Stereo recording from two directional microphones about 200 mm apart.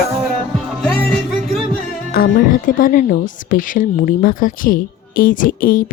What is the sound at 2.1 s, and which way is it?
Speech, 45° left (ahead or behind).